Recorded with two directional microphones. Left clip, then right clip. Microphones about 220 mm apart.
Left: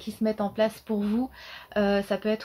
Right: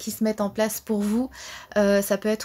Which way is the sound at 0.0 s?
45° right (ahead or behind).